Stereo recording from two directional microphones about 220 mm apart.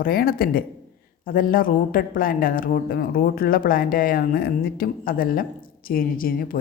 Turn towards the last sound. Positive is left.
turn(degrees=40)  # may be behind; listen again after turning